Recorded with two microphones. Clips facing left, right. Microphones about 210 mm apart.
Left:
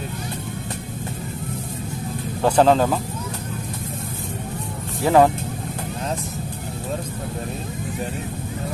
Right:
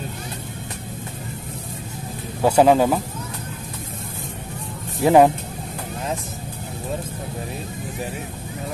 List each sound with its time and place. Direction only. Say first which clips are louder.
2.4 s speech: right 1 dB; 10° right (ahead or behind)
5.0 s speech: right 2 dB; 15° right (ahead or behind)